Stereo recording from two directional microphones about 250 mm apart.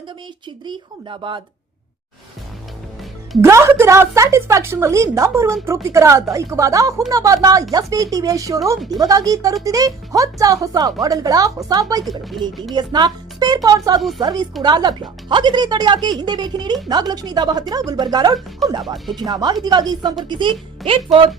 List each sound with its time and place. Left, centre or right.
0.6 s speech: centre
3.4 s a woman's voice: centre
18.6 s speech: centre
19.1 s a woman's voice: centre